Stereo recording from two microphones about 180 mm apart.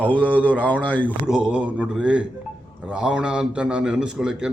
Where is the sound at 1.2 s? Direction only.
5° right (ahead or behind).